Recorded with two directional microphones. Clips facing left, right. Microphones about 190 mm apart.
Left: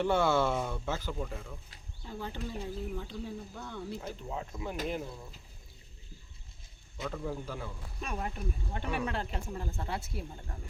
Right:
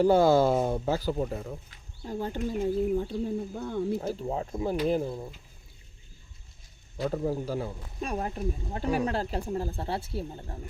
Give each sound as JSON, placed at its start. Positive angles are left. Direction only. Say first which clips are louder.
{"t": 0.0, "sound": "speech", "louder": "right 7 dB", "side_deg": -35}
{"t": 7.0, "sound": "speech", "louder": "right 8 dB", "side_deg": -35}